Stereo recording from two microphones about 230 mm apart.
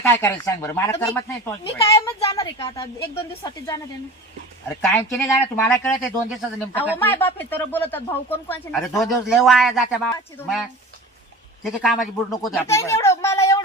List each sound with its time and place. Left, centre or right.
0.1 s speech: centre
4.8 s speech: centre
12.6 s speech: centre